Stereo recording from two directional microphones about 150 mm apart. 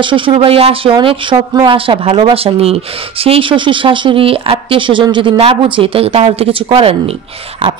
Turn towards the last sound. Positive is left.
turn(degrees=-35)  # may be behind; listen again after turning